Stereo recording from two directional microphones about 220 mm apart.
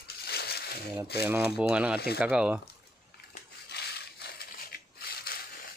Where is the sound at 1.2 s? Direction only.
10° right (ahead or behind).